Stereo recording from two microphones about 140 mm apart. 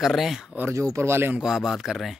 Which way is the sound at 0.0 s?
Centre (ahead or behind).